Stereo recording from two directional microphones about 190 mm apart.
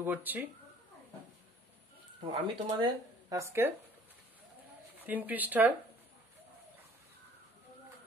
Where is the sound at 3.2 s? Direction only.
15° right (ahead or behind).